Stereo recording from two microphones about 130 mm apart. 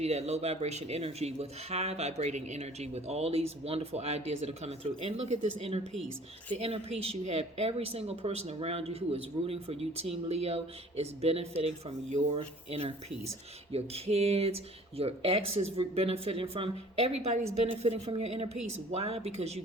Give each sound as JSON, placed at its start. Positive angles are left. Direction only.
{"t": 0.0, "sound": "speech", "side_deg": -55}